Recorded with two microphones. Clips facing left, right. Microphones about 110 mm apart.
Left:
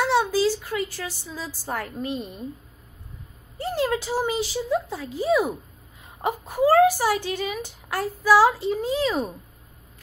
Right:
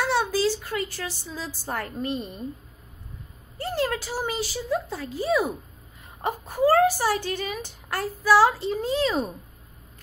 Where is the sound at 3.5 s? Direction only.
15° left (ahead or behind).